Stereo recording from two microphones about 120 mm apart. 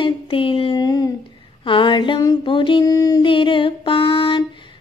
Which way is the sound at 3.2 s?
45° left (ahead or behind).